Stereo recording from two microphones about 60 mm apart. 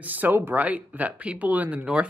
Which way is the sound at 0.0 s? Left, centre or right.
Right.